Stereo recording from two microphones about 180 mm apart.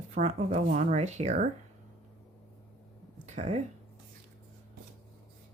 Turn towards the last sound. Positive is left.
turn(degrees=-40)  # may be behind; listen again after turning